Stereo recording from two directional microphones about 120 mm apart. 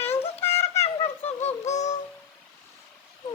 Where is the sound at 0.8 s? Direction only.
55° left (ahead or behind); by 1.9 s 75° left (ahead or behind).